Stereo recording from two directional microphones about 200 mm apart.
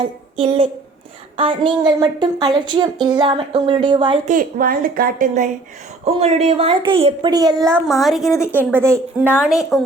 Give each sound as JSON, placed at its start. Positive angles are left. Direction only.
{"t": 0.0, "sound": "a woman's voice", "side_deg": -30}
{"t": 4.3, "sound": "speech", "side_deg": -40}
{"t": 6.1, "sound": "a woman's voice", "side_deg": -30}
{"t": 7.6, "sound": "a child's voice", "side_deg": 0}
{"t": 8.3, "sound": "a woman's voice", "side_deg": 15}
{"t": 8.7, "sound": "a child's voice", "side_deg": -10}